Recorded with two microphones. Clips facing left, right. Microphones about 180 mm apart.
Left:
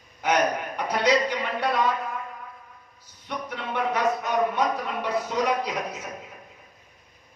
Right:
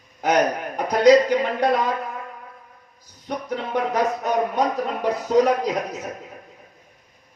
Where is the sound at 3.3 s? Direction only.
40° right (ahead or behind).